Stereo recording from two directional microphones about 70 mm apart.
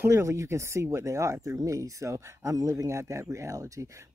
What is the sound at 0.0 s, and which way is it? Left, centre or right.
Speech, right.